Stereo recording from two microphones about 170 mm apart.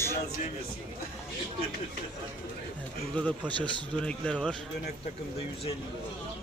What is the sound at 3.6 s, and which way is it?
Speech, 5° left (ahead or behind).